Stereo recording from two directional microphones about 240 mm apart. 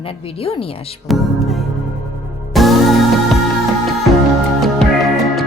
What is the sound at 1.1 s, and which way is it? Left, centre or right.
Music, centre.